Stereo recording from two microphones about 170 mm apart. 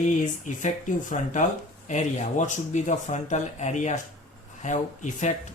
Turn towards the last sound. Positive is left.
turn(degrees=45)  # may be behind; listen again after turning